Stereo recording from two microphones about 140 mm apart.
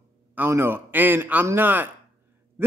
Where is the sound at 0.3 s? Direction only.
15° right (ahead or behind).